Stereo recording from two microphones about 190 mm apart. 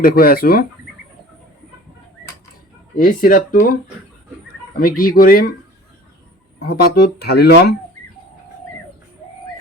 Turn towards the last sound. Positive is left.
turn(degrees=60)  # may be behind; listen again after turning